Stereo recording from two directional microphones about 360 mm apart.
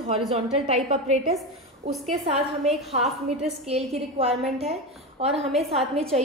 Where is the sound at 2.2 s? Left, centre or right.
Centre.